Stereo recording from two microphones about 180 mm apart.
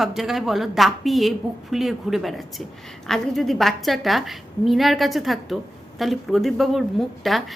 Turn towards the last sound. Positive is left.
turn(degrees=0)  # may be behind; listen again after turning